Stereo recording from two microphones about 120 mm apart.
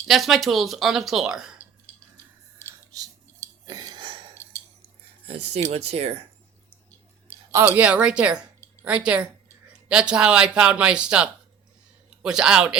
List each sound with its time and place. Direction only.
0.1 s speech: centre (ahead or behind)
1.9 s cutlery: 10° left (ahead or behind)
2.9 s scissors: 30° right (ahead or behind)
3.7 s a sound: 35° right (ahead or behind)
4.4 s a sound: 20° left (ahead or behind)
5.2 s speech: 60° right (ahead or behind)
7.5 s a woman's voice: 15° right (ahead or behind)